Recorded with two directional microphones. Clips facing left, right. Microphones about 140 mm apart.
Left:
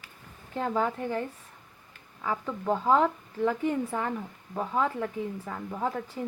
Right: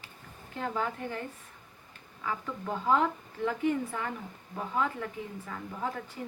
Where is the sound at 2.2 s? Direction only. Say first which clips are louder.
Left 5 dB; 35° left (ahead or behind).